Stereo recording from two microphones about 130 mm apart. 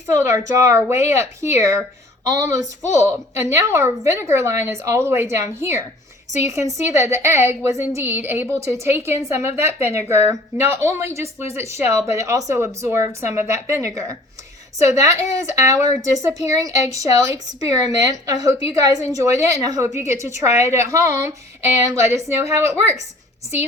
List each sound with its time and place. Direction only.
0.1 s a woman's voice: 25° right (ahead or behind)